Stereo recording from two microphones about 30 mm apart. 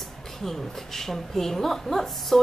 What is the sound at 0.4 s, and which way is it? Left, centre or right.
Speech, centre.